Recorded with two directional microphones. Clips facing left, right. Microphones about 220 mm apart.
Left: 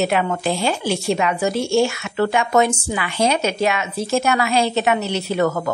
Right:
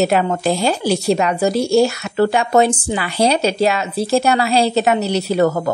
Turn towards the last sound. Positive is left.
turn(degrees=-35)  # may be behind; listen again after turning